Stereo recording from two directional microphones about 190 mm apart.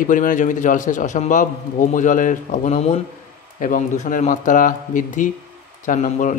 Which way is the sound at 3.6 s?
45° left (ahead or behind).